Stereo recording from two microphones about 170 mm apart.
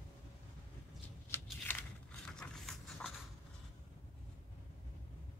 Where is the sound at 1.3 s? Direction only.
10° left (ahead or behind).